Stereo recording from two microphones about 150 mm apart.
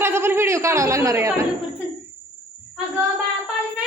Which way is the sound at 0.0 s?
15° right (ahead or behind).